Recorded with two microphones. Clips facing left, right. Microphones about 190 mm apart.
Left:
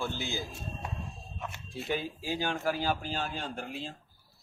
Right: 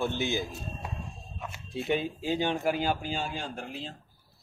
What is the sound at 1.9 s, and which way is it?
A man's voice, 25° right (ahead or behind).